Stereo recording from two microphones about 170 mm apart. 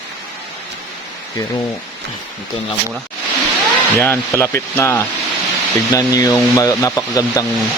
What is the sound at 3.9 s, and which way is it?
Speech, 10° left (ahead or behind).